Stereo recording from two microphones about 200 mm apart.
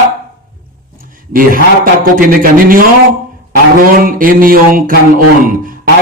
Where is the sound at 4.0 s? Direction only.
45° right (ahead or behind).